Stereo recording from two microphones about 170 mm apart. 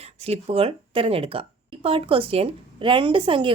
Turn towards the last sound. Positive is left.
turn(degrees=-30)  # may be behind; listen again after turning